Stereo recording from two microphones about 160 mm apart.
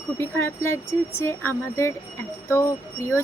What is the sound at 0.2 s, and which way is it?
Speech, 15° left (ahead or behind).